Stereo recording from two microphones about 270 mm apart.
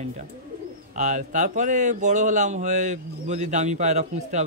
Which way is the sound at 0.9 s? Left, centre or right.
Right.